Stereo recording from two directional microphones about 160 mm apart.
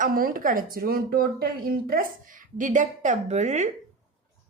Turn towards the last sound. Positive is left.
turn(degrees=-45)  # may be behind; listen again after turning